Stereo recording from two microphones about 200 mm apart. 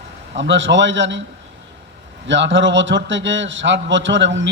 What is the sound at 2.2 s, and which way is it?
A man's voice, 65° right (ahead or behind).